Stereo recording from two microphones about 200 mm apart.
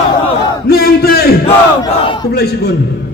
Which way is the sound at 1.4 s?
25° left (ahead or behind).